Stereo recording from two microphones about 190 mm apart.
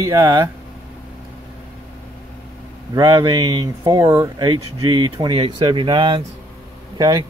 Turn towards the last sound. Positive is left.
turn(degrees=-20)  # may be behind; listen again after turning